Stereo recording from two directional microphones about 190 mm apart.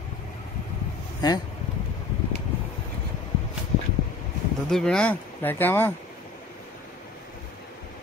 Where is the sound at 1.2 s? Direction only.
20° left (ahead or behind).